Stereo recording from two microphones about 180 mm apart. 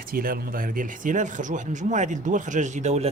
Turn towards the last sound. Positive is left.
turn(degrees=-40)  # may be behind; listen again after turning